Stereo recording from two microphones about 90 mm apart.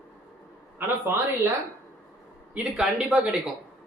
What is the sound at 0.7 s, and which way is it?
Speech, 25° right (ahead or behind).